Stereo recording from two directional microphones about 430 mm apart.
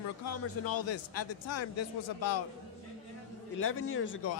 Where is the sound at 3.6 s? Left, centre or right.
Left.